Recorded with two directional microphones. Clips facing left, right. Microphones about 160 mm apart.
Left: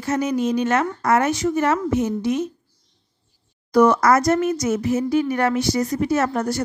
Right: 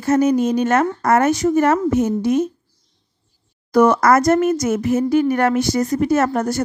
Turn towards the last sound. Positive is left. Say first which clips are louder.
# right 3 dB
turn(degrees=-45)  # may be behind; listen again after turning